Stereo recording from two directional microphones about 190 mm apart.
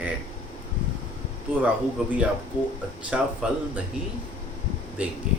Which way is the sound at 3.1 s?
5° right (ahead or behind).